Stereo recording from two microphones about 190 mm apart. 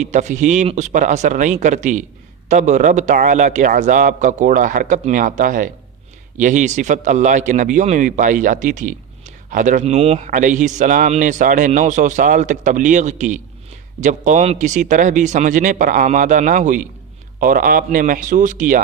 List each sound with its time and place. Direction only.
0.0 s a man's voice: 40° right (ahead or behind)